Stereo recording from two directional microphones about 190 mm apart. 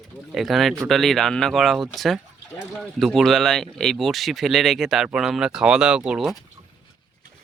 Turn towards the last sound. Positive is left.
turn(degrees=0)  # may be behind; listen again after turning